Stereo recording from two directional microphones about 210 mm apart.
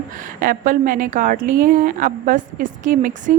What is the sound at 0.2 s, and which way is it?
A woman's voice, 40° right (ahead or behind).